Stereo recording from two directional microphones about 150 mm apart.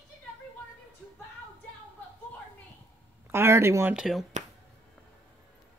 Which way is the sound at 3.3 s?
15° right (ahead or behind).